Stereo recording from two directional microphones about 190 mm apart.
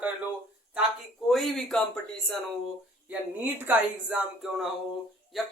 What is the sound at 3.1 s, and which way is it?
Speech, 10° right (ahead or behind).